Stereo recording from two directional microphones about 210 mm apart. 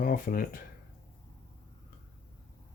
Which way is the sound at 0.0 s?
45° left (ahead or behind).